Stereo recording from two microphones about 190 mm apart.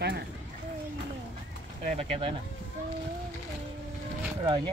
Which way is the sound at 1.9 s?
30° right (ahead or behind).